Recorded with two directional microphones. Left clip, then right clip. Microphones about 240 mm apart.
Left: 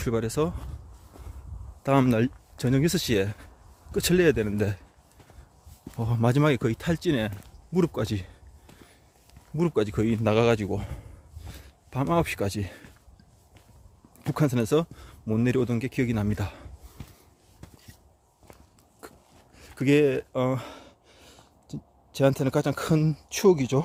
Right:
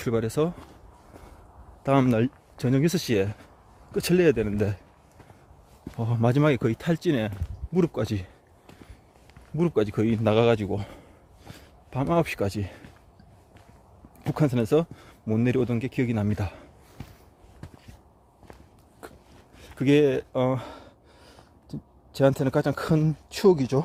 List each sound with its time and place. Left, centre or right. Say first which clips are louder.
0.0 s speech: right 1 dB; centre
1.8 s speech: even; centre
6.0 s speech: right 1 dB; centre
14.2 s speech: right 1 dB; centre
19.0 s a sound: right 2 dB; centre
19.5 s gasp: right 1 dB; centre